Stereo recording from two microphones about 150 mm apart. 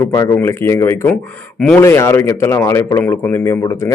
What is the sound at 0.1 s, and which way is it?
A man's voice, 20° left (ahead or behind).